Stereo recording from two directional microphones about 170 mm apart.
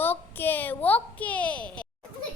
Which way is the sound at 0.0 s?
10° left (ahead or behind).